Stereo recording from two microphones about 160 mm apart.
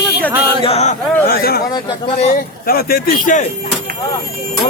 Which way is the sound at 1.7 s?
35° left (ahead or behind).